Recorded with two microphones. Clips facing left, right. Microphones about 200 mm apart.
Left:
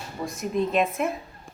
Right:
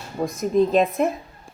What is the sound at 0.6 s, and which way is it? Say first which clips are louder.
Speech: right 6 dB; 35° right (ahead or behind).